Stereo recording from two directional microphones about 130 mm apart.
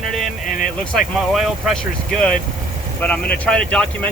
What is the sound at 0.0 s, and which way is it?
Vehicle, centre (ahead or behind).